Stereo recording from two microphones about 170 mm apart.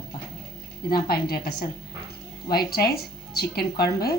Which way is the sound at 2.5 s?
65° left (ahead or behind).